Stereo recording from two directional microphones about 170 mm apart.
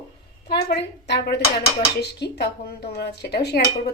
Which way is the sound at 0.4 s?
75° left (ahead or behind).